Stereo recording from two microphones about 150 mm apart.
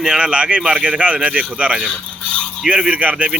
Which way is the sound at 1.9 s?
5° left (ahead or behind).